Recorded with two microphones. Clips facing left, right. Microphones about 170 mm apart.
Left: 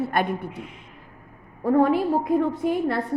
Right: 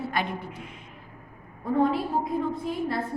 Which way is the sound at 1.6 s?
70° left (ahead or behind).